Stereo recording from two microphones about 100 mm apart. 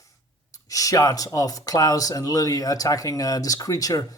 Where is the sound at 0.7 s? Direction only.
35° left (ahead or behind).